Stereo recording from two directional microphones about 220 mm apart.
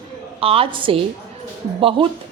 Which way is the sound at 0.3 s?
25° right (ahead or behind).